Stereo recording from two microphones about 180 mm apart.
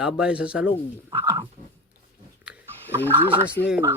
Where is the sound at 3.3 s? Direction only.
25° right (ahead or behind).